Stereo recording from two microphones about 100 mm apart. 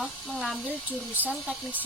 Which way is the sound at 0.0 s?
Centre (ahead or behind).